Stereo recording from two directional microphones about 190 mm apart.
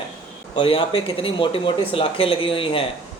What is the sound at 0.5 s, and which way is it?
Speech, 25° left (ahead or behind).